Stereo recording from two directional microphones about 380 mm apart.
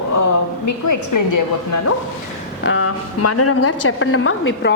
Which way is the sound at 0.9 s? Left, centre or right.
Left.